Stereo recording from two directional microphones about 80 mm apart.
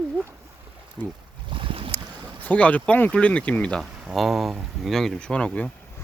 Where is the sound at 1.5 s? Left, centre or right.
Right.